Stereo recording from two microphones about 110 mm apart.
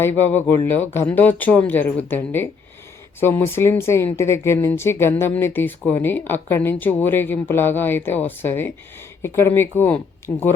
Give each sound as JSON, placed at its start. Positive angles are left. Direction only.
{"t": 0.0, "sound": "speech", "side_deg": 20}